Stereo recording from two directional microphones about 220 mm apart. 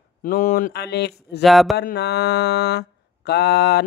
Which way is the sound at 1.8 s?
45° left (ahead or behind).